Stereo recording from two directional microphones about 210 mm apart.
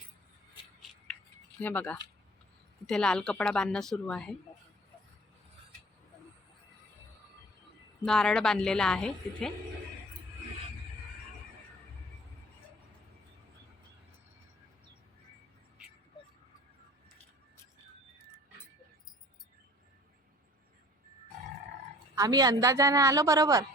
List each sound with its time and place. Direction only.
1.5 s speech: 5° left (ahead or behind)
8.0 s speech: 5° left (ahead or behind)
22.1 s a woman's voice: 15° right (ahead or behind)